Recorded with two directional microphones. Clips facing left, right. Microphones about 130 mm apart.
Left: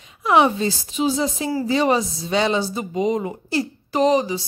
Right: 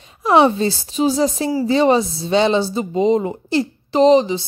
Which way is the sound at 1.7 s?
30° right (ahead or behind).